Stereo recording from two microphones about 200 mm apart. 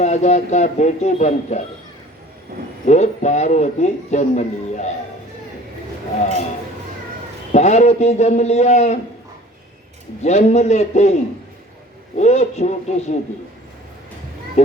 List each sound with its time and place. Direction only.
0.0 s a man's voice: 35° left (ahead or behind)
2.8 s a man's voice: 35° left (ahead or behind)
7.5 s a man's voice: 35° left (ahead or behind)
10.2 s a man's voice: 35° left (ahead or behind)